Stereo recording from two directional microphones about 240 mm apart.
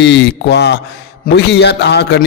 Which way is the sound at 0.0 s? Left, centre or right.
Left.